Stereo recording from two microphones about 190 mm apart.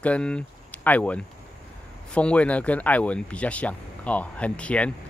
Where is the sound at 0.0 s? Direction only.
5° left (ahead or behind).